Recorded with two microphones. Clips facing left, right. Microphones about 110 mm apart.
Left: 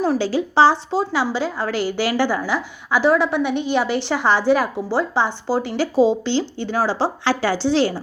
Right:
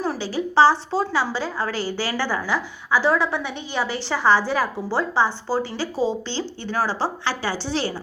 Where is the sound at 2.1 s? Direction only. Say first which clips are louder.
Left 4 dB; 15° left (ahead or behind).